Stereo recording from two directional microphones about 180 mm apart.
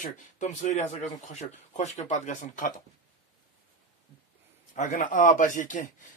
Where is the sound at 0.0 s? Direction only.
40° left (ahead or behind).